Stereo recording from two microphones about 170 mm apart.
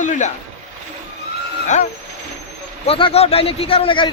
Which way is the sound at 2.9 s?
35° left (ahead or behind).